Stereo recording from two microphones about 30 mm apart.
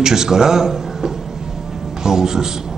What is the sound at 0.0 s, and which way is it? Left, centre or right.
A man's voice, centre.